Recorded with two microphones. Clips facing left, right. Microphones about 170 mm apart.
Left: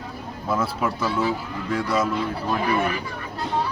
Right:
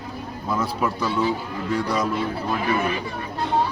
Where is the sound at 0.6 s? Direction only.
5° left (ahead or behind).